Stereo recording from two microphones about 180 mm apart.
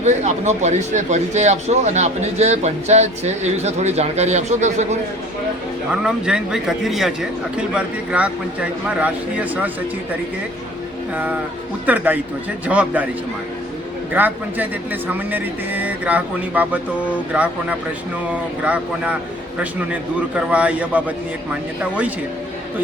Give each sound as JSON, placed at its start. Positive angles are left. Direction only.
{"t": 0.0, "sound": "speech", "side_deg": -40}
{"t": 5.9, "sound": "a man's voice", "side_deg": -5}
{"t": 11.1, "sound": "a man's voice", "side_deg": -10}
{"t": 14.1, "sound": "a man's voice", "side_deg": -10}